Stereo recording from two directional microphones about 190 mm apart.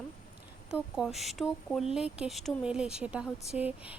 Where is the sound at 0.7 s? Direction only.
5° right (ahead or behind).